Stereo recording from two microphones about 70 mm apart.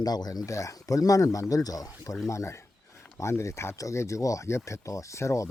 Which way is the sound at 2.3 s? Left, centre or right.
Left.